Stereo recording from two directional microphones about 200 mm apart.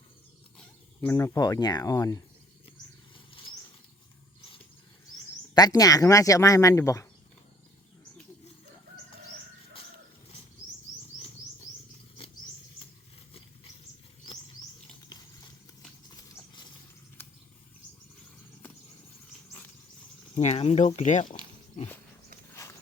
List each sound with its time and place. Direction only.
1.0 s speech: 15° left (ahead or behind)
5.5 s speech: 20° left (ahead or behind)
20.3 s speech: 30° left (ahead or behind)